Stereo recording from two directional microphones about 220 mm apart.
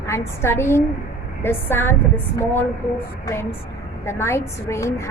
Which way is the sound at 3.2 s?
10° left (ahead or behind).